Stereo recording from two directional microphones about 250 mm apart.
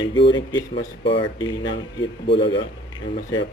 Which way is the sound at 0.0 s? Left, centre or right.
Centre.